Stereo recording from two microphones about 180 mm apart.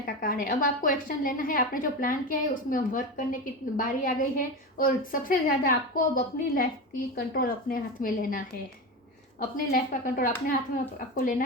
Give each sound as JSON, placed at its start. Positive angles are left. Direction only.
{"t": 0.0, "sound": "a woman's voice", "side_deg": 55}
{"t": 9.7, "sound": "a woman's voice", "side_deg": 50}